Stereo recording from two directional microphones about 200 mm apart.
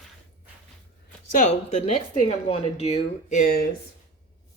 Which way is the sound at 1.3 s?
35° left (ahead or behind).